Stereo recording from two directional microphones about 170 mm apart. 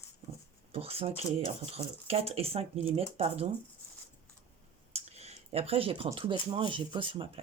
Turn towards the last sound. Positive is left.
turn(degrees=-30)  # may be behind; listen again after turning